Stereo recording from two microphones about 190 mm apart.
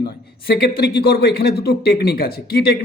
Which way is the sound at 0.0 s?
55° left (ahead or behind).